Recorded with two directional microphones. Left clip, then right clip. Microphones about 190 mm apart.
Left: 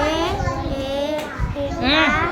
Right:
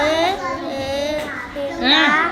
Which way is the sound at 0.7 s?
10° left (ahead or behind).